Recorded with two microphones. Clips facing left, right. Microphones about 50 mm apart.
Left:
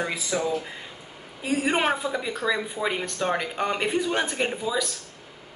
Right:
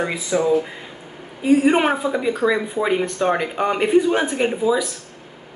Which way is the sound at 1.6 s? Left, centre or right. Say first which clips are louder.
Right 7 dB; centre.